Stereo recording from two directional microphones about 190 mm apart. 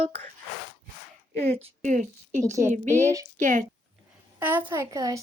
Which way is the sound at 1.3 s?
35° right (ahead or behind).